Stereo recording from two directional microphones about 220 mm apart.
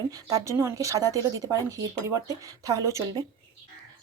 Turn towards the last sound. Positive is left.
turn(degrees=-15)  # may be behind; listen again after turning